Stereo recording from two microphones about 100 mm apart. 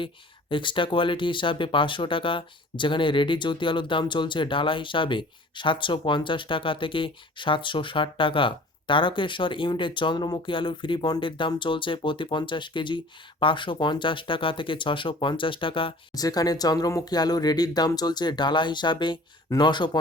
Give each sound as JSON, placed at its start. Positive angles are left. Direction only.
{"t": 0.5, "sound": "speech", "side_deg": 55}
{"t": 16.1, "sound": "speech", "side_deg": 40}